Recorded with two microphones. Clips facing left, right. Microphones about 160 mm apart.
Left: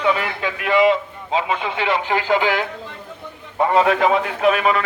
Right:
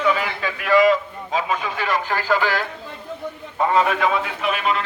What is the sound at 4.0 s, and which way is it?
Speech, 45° left (ahead or behind).